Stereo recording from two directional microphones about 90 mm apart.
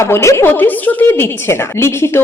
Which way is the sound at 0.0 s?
30° left (ahead or behind).